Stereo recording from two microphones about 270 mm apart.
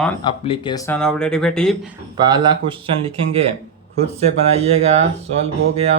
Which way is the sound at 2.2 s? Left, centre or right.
Centre.